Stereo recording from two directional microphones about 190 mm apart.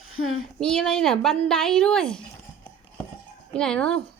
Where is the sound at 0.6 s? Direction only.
Centre (ahead or behind).